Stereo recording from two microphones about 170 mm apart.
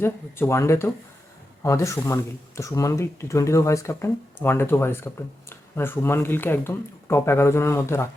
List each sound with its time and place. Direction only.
0.0 s speech: 15° left (ahead or behind)